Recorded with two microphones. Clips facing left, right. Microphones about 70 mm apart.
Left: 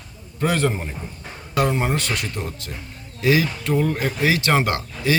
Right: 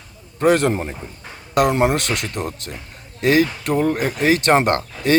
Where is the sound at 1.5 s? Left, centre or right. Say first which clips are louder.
Right 5 dB; right.